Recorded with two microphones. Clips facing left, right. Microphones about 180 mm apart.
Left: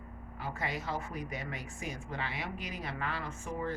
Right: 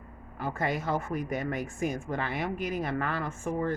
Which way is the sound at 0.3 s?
50° right (ahead or behind).